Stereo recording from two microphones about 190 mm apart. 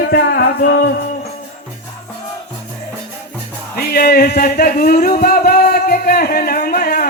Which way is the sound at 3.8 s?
55° left (ahead or behind).